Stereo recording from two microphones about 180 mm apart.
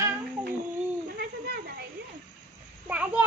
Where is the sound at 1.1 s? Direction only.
60° right (ahead or behind).